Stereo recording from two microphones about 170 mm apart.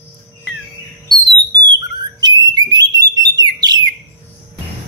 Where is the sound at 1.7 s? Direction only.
25° right (ahead or behind).